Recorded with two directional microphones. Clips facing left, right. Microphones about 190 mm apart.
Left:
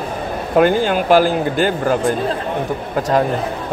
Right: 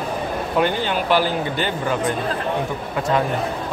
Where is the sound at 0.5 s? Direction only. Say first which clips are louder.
Left 7 dB; 45° left (ahead or behind).